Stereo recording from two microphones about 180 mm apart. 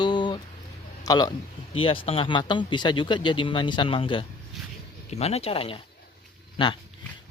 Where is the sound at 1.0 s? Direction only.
20° left (ahead or behind).